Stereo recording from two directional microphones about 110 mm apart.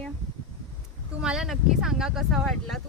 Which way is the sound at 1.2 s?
5° right (ahead or behind).